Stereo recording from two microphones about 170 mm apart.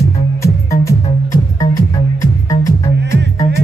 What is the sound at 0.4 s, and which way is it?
Music, 20° left (ahead or behind).